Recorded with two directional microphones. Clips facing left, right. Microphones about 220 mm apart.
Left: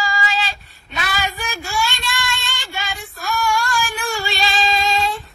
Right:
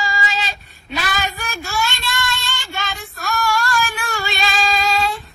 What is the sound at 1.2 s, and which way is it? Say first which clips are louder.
Child singing: even; 15° left (ahead or behind).